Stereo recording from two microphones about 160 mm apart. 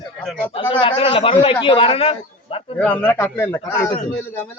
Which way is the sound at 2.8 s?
10° left (ahead or behind).